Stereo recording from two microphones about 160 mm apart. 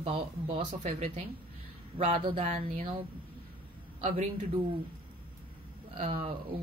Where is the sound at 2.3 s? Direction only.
45° right (ahead or behind).